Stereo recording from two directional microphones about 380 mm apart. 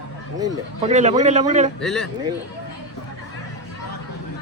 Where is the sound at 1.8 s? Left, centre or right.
Centre.